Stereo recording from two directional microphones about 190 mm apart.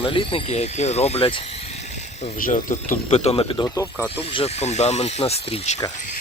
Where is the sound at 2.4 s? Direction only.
40° left (ahead or behind).